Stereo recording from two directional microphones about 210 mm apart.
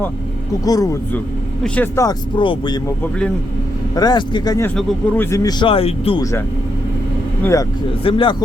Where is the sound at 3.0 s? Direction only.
5° left (ahead or behind).